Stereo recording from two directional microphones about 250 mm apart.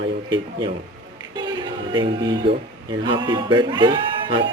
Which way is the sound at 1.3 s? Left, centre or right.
Centre.